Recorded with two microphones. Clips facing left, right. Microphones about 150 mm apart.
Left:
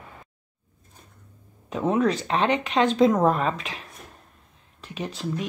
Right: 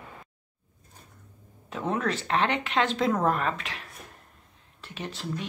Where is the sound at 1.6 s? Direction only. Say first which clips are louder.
Left 6 dB; 15° left (ahead or behind).